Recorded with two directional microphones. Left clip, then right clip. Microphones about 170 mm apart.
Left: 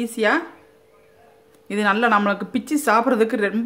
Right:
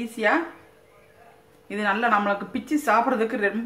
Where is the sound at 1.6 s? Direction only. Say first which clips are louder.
Left 4 dB; 65° left (ahead or behind).